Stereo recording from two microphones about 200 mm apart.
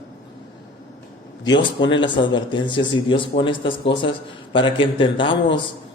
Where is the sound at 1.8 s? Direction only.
25° left (ahead or behind).